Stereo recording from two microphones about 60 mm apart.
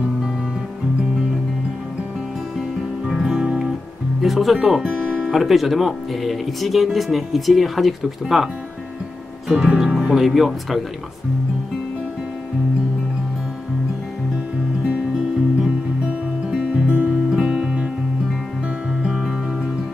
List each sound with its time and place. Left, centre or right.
3.1 s music: centre
4.2 s speech: centre
5.3 s speech: centre
9.5 s speech: centre
15.6 s music: centre
16.8 s music: right
17.3 s music: centre
19.0 s music: centre